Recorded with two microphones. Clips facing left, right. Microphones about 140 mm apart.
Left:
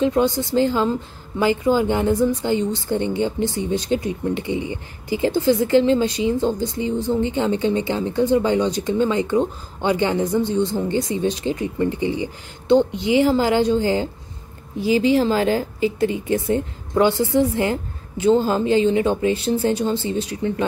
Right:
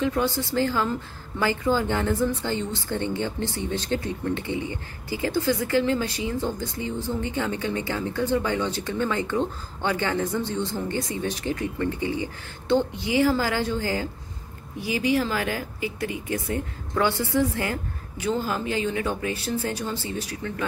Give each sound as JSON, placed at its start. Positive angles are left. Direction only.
{"t": 0.0, "sound": "speech", "side_deg": 20}